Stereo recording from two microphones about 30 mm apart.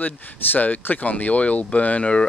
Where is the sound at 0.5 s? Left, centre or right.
Left.